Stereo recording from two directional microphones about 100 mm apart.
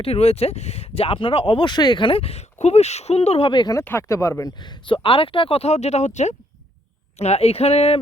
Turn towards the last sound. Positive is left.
turn(degrees=90)